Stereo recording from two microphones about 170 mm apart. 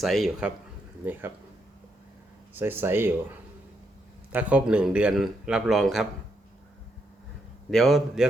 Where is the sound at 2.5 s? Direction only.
10° right (ahead or behind).